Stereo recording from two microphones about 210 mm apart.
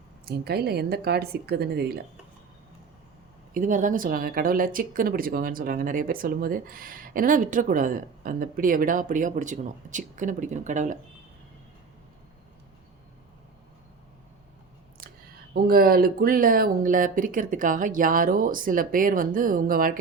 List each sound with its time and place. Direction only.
0.3 s a woman's voice: 50° right (ahead or behind)
3.5 s speech: 40° right (ahead or behind)
15.0 s a sound: 45° right (ahead or behind)
15.5 s speech: 45° right (ahead or behind)